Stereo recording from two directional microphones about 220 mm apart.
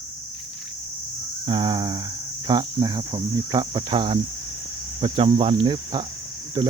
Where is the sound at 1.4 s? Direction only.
20° right (ahead or behind).